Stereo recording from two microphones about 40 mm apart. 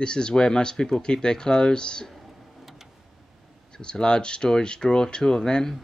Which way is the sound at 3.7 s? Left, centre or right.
Left.